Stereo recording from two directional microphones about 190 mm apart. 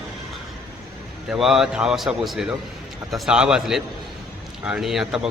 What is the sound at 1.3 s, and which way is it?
A man's voice, centre (ahead or behind).